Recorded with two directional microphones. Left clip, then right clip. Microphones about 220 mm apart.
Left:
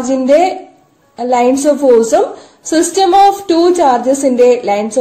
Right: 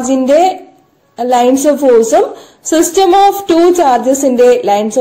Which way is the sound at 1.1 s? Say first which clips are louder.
Right 2 dB; 25° right (ahead or behind).